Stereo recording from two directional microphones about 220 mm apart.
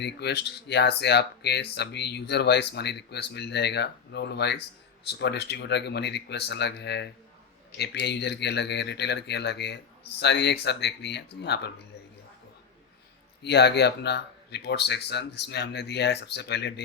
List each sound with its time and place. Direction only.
0.0 s speech: 50° left (ahead or behind)
13.4 s speech: 50° left (ahead or behind)